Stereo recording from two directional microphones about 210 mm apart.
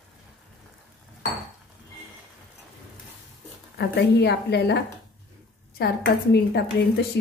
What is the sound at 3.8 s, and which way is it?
A woman's voice, 55° left (ahead or behind).